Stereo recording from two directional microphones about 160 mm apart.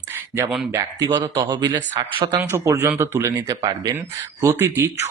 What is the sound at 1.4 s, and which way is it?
Speech, 30° right (ahead or behind).